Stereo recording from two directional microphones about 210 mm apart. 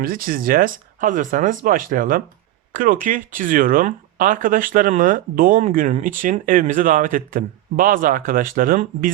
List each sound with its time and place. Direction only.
0.0 s speech: 45° right (ahead or behind)